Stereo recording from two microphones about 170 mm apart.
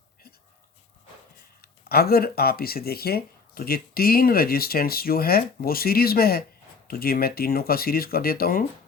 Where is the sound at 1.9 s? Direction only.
65° left (ahead or behind).